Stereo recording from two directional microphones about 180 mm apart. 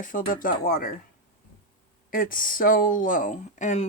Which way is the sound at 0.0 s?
50° left (ahead or behind).